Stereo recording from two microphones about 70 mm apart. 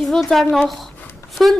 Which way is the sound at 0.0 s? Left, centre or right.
Centre.